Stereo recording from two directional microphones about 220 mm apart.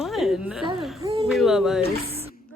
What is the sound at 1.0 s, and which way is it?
Speech, 25° right (ahead or behind).